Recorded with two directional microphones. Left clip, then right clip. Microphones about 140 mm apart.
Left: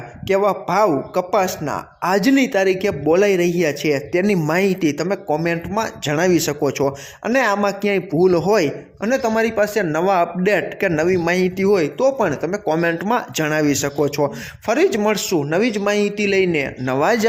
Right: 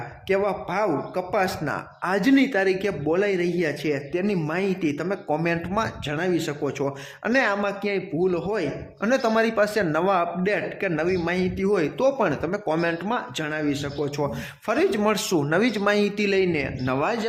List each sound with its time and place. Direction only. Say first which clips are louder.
0.3 s a man's voice: left 7 dB; 30° left (ahead or behind)
5.3 s a man's voice: left 2 dB; 20° left (ahead or behind)
6.1 s a man's voice: left 8 dB; 45° left (ahead or behind)
9.0 s a man's voice: left 3 dB; 20° left (ahead or behind); by 11.8 s 35° left (ahead or behind)
11.8 s a man's voice: left 5 dB; 20° left (ahead or behind); by 14.1 s 55° left (ahead or behind)
14.7 s a man's voice: left 5 dB; 25° left (ahead or behind)
16.4 s a man's voice: left 5 dB; 30° left (ahead or behind)